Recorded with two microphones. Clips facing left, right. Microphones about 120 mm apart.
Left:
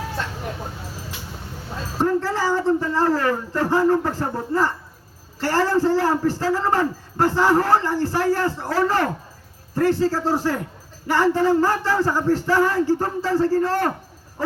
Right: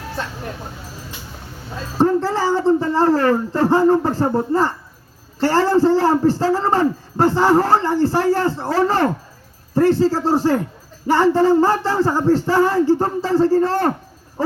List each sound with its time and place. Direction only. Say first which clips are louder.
2.0 s a man's voice: right 4 dB; 20° right (ahead or behind)